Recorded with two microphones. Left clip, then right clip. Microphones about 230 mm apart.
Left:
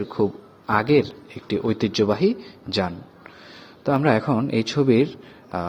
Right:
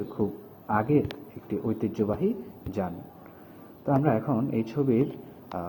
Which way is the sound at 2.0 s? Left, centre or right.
Left.